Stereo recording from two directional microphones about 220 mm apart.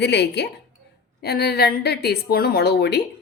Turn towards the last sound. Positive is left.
turn(degrees=50)  # may be behind; listen again after turning